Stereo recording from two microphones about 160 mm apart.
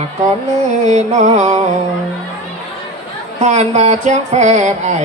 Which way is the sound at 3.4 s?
45° right (ahead or behind).